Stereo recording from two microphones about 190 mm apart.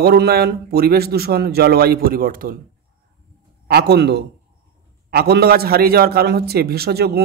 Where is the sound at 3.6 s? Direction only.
60° right (ahead or behind).